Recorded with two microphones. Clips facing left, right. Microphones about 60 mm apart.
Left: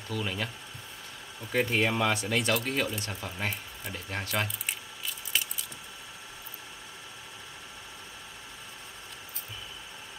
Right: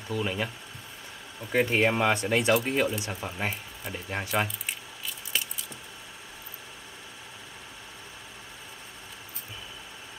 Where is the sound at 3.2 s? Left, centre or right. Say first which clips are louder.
Right 2 dB; centre.